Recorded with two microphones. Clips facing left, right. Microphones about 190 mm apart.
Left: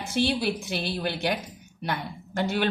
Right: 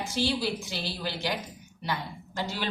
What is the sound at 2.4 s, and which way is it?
Speech, 60° left (ahead or behind).